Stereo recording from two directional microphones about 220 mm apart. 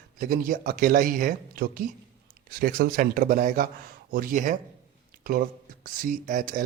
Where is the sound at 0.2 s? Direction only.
40° right (ahead or behind).